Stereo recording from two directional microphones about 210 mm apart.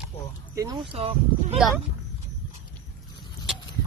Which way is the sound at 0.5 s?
20° right (ahead or behind).